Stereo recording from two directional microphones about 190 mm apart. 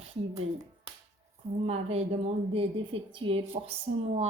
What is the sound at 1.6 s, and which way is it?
A woman's voice, 30° right (ahead or behind).